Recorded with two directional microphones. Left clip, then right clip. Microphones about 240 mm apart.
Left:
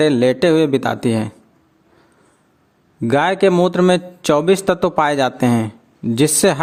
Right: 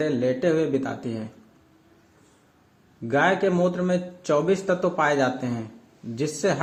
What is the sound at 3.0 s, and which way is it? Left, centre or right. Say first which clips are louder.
A man's voice: left 7 dB; left.